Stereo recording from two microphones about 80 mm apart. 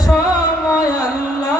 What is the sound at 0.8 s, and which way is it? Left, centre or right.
Music, left.